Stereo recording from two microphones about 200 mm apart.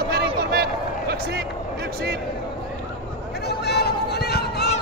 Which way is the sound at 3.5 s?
55° left (ahead or behind).